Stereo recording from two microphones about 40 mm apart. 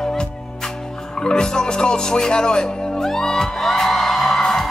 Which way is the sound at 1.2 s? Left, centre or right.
Centre.